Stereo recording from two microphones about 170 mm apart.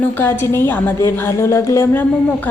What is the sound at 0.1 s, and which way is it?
A woman's voice, 10° left (ahead or behind).